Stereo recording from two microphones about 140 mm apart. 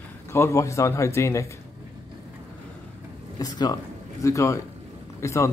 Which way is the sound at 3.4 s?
25° left (ahead or behind).